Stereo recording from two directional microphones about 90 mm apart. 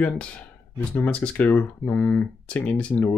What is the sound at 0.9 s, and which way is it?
Speech, 15° left (ahead or behind).